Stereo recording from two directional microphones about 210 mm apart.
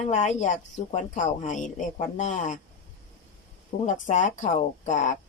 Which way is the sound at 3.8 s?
35° left (ahead or behind).